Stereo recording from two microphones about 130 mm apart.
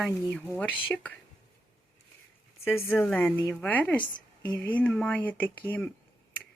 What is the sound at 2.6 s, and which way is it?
Speech, 15° left (ahead or behind).